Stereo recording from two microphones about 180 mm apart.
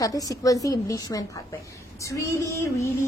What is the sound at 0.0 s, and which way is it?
A woman's voice, 20° left (ahead or behind).